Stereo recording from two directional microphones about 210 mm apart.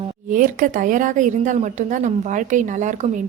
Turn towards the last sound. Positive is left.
turn(degrees=-35)  # may be behind; listen again after turning